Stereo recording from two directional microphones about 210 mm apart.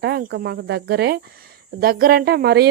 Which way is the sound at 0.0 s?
50° right (ahead or behind).